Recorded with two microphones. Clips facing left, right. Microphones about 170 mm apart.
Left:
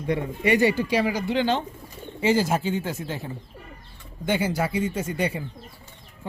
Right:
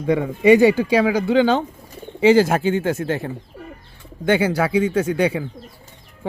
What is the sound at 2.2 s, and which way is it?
Speech, 70° right (ahead or behind).